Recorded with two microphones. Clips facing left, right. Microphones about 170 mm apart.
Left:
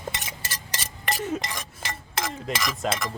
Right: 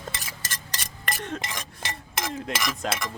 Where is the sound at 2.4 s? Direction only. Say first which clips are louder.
Left 3 dB; centre (ahead or behind).